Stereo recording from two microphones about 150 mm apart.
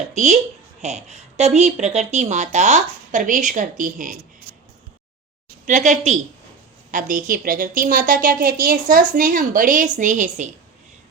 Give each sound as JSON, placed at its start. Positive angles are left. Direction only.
{"t": 0.1, "sound": "speech", "side_deg": -50}
{"t": 5.6, "sound": "a woman's voice", "side_deg": -55}